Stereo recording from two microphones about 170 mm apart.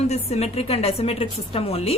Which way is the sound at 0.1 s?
40° left (ahead or behind).